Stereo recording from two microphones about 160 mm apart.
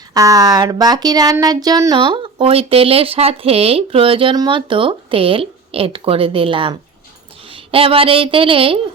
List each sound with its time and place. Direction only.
0.1 s speech: 20° right (ahead or behind)